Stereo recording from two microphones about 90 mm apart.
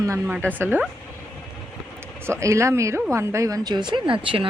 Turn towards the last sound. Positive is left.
turn(degrees=-70)  # may be behind; listen again after turning